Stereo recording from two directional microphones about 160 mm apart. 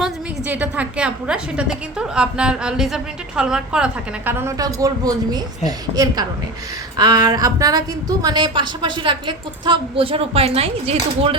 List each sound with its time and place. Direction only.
0.0 s a woman's voice: 10° right (ahead or behind); by 11.3 s 35° right (ahead or behind)